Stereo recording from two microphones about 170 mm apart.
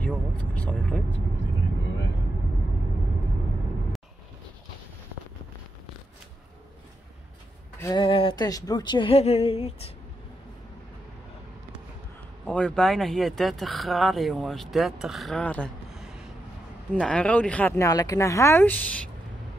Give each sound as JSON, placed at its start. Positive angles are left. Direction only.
{"t": 0.4, "sound": "speech", "side_deg": 10}
{"t": 7.8, "sound": "speech", "side_deg": 25}
{"t": 12.4, "sound": "speech", "side_deg": 5}